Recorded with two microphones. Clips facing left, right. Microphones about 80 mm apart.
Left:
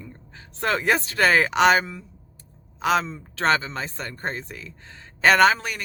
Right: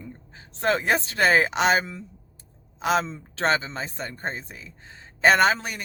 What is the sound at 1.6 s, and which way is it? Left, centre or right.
Speech, left.